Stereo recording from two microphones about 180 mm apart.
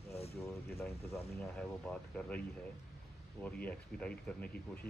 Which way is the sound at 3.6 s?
5° left (ahead or behind).